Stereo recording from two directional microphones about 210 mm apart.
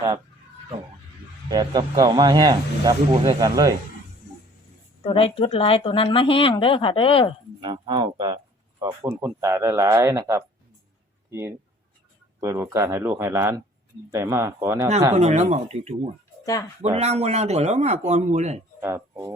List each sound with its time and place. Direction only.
1.5 s speech: 20° right (ahead or behind)
5.0 s speech: 25° left (ahead or behind)
7.6 s speech: 20° right (ahead or behind)
15.1 s speech: 30° right (ahead or behind)
18.8 s speech: 10° right (ahead or behind)